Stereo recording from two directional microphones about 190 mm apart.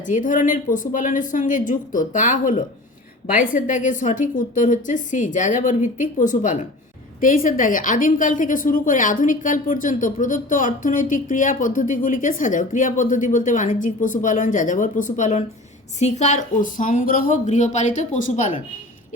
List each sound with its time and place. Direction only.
0.0 s a woman's voice: 45° left (ahead or behind)